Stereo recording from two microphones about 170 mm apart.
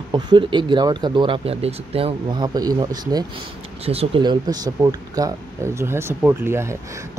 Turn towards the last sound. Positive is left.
turn(degrees=-15)  # may be behind; listen again after turning